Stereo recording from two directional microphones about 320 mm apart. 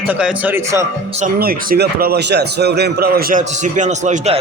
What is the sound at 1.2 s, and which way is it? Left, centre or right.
A man's voice, right.